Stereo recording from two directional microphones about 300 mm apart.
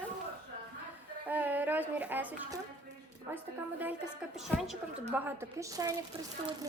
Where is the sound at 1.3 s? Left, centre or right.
Centre.